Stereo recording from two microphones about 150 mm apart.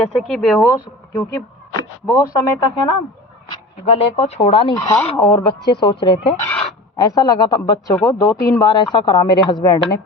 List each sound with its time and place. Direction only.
0.1 s speech: 5° left (ahead or behind)
0.6 s speech: 20° left (ahead or behind)
3.8 s speech: 45° left (ahead or behind)
4.7 s speech: 25° left (ahead or behind)